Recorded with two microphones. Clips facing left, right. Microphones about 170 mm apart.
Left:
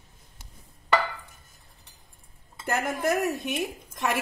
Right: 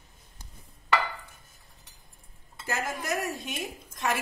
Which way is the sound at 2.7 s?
60° left (ahead or behind).